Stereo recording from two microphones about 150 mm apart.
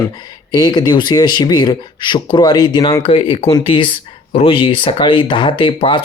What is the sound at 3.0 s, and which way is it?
Speech, 35° left (ahead or behind).